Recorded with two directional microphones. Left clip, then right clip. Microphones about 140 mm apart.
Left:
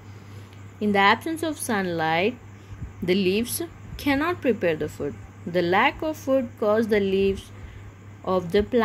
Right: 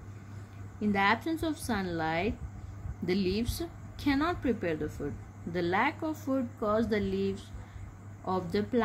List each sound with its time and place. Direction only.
0.7 s speech: 20° left (ahead or behind)